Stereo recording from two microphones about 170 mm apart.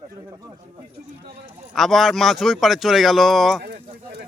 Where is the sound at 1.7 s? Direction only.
Centre (ahead or behind).